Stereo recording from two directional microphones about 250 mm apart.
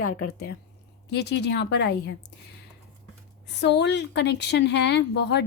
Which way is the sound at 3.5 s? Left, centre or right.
Left.